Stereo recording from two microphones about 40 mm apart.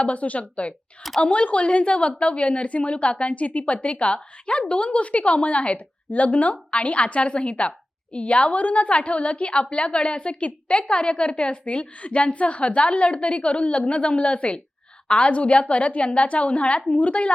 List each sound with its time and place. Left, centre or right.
0.0 s a woman's voice: left